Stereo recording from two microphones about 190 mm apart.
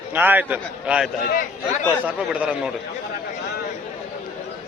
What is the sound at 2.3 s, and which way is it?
Speech, 5° right (ahead or behind).